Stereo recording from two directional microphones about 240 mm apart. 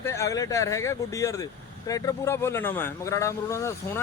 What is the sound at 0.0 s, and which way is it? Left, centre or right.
A man's voice, centre.